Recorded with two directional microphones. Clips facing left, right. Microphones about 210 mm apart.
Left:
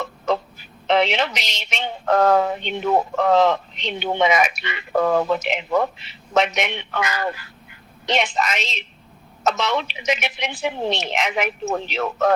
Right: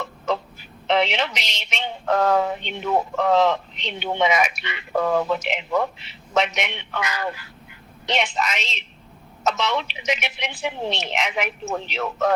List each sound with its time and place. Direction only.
0.9 s speech: 45° left (ahead or behind)